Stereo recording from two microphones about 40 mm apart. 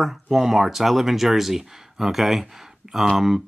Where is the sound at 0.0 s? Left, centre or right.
Centre.